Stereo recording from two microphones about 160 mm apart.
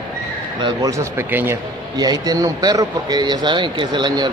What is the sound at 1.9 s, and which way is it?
Speech, 25° right (ahead or behind).